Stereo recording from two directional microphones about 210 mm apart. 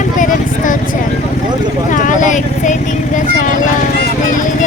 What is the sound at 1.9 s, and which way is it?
A woman's voice, 35° left (ahead or behind).